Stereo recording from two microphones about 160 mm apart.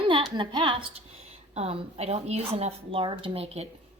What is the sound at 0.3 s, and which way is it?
Speech, 30° right (ahead or behind).